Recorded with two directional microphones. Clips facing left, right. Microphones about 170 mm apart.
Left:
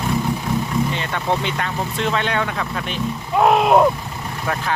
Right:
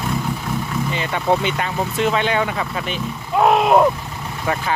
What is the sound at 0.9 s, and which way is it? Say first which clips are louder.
Speech: right 3 dB; 5° right (ahead or behind).